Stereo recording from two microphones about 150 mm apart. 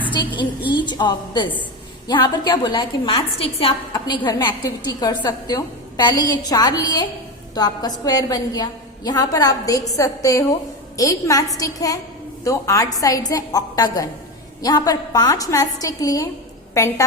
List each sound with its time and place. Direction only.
0.2 s a woman's voice: 25° left (ahead or behind)
3.9 s a woman's voice: 30° left (ahead or behind)